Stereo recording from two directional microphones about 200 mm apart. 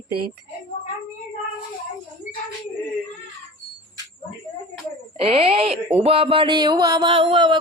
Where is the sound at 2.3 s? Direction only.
40° left (ahead or behind).